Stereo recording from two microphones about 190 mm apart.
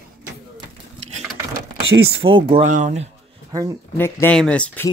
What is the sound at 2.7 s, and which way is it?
Speech, 40° right (ahead or behind).